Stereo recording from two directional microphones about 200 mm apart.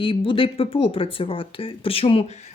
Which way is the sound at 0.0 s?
25° left (ahead or behind).